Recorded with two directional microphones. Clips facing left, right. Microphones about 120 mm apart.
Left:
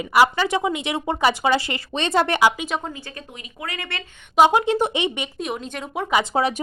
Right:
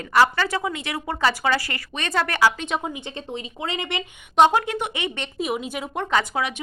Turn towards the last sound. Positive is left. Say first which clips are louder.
# left 5 dB
turn(degrees=35)  # may be behind; listen again after turning